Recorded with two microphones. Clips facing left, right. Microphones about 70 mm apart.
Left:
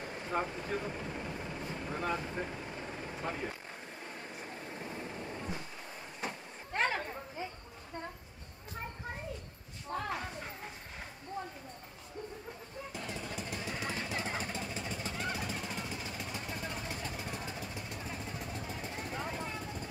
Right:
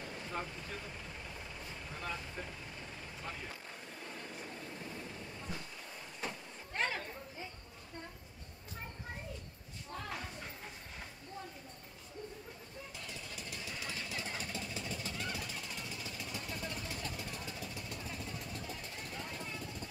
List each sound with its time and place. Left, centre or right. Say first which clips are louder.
0.0 s vehicle: left 6 dB; left
4.0 s vehicle: even; left
6.7 s chatter: left 5 dB; left
9.9 s a sound: left 8 dB; left
12.9 s jackhammer: left 9 dB; left
19.4 s vehicle: left 4 dB; left